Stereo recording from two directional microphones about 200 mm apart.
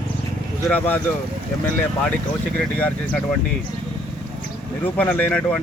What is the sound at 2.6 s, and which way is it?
Speech, 5° left (ahead or behind).